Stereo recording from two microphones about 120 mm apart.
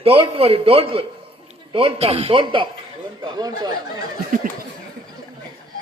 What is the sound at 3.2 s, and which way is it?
Speech, 35° right (ahead or behind).